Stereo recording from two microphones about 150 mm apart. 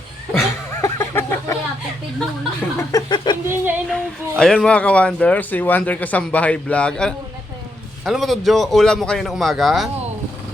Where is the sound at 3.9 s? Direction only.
5° left (ahead or behind).